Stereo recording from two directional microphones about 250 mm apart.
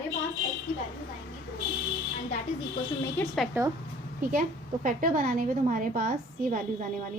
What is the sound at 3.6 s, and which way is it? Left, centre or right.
Speech, centre.